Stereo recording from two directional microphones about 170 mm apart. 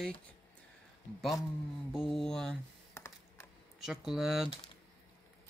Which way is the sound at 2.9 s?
15° left (ahead or behind).